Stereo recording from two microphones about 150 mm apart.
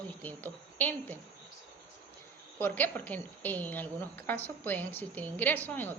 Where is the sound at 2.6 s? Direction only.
15° left (ahead or behind).